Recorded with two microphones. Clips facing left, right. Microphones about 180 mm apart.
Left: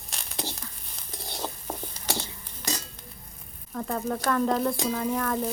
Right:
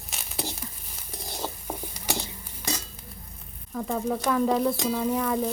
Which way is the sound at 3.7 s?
5° right (ahead or behind).